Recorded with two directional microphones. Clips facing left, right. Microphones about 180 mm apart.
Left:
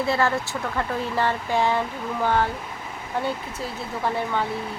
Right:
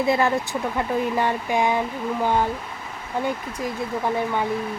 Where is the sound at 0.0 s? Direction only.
15° right (ahead or behind).